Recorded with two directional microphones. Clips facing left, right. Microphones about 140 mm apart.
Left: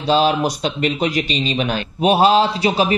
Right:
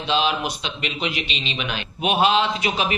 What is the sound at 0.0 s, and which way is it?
Speech, 40° left (ahead or behind).